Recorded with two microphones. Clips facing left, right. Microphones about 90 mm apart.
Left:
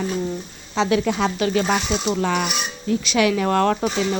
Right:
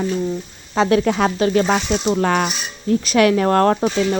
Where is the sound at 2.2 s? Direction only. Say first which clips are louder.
Right 3 dB; 50° right (ahead or behind).